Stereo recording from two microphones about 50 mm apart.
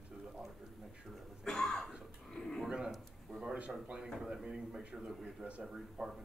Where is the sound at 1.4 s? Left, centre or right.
Centre.